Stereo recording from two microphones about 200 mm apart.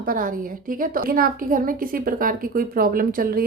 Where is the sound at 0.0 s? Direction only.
45° right (ahead or behind).